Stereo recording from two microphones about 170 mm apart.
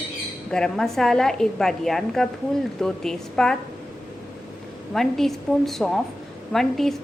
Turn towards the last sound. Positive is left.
turn(degrees=0)  # may be behind; listen again after turning